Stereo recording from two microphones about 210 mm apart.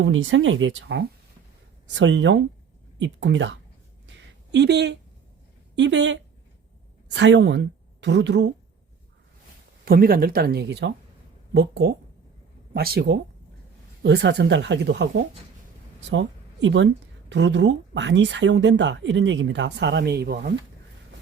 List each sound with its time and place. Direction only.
0.0 s a woman's voice: 70° right (ahead or behind)
9.8 s speech: 45° right (ahead or behind)